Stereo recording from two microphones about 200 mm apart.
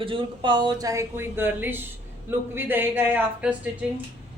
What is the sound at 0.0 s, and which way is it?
Speech, 25° right (ahead or behind).